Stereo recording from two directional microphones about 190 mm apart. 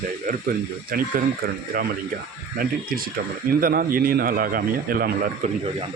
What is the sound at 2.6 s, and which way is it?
Speech, 50° right (ahead or behind).